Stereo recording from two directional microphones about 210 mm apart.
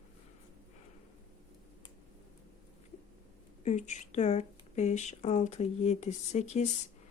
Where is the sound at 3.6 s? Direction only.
35° left (ahead or behind).